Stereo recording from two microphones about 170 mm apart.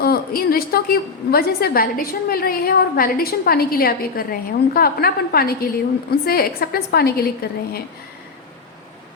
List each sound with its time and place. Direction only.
0.0 s a woman's voice: 60° left (ahead or behind)